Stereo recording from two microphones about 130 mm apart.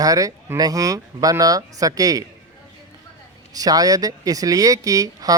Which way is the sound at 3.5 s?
30° right (ahead or behind).